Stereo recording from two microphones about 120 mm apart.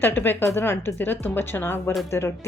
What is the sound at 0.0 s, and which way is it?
Speech, 15° left (ahead or behind).